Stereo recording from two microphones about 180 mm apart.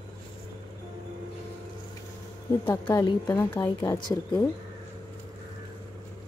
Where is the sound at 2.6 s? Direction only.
15° left (ahead or behind).